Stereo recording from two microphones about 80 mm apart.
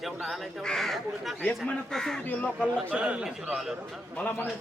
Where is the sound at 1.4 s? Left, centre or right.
Centre.